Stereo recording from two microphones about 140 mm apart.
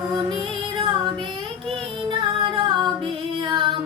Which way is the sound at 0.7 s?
35° right (ahead or behind).